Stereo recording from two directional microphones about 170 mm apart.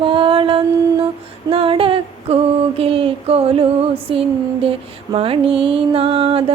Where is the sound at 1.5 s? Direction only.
30° right (ahead or behind).